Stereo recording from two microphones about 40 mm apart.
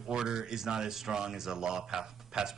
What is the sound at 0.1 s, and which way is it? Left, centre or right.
Speech, centre.